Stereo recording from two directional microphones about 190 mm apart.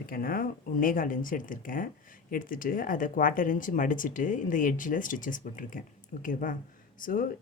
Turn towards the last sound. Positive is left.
turn(degrees=45)  # may be behind; listen again after turning